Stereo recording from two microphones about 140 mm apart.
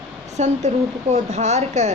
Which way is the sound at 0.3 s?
55° right (ahead or behind).